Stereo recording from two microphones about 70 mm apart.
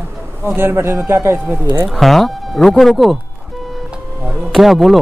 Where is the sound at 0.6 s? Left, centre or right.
Right.